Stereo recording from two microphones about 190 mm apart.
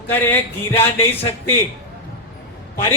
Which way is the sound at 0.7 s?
30° left (ahead or behind).